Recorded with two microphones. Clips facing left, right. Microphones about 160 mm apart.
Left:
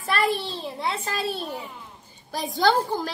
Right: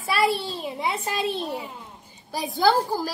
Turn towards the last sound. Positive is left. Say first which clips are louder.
# right 1 dB
turn(degrees=-5)  # may be behind; listen again after turning